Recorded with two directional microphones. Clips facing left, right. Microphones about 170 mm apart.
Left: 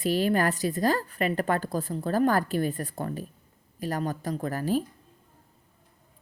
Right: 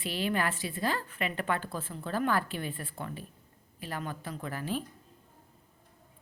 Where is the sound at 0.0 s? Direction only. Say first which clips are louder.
Left 7 dB; 40° left (ahead or behind).